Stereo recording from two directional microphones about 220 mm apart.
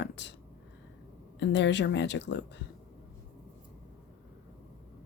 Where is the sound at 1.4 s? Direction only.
55° left (ahead or behind).